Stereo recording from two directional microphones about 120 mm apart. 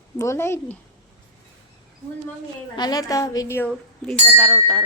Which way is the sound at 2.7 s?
35° left (ahead or behind).